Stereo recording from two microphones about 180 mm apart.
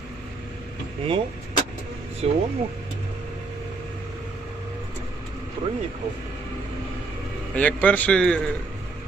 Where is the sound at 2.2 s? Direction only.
35° right (ahead or behind).